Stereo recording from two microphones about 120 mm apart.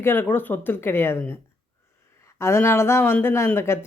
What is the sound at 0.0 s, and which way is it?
Speech, 20° left (ahead or behind).